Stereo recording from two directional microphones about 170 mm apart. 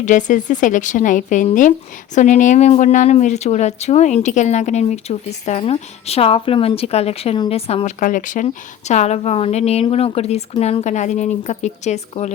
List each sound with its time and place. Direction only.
0.0 s speech: 45° left (ahead or behind)